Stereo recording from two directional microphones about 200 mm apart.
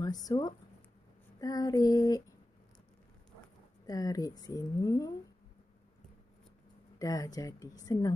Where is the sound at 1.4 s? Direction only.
20° left (ahead or behind).